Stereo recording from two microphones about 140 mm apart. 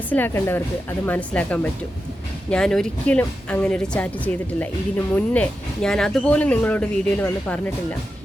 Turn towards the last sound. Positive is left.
turn(degrees=10)  # may be behind; listen again after turning